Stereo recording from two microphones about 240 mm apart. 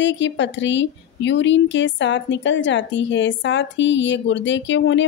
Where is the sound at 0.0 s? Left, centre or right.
Left.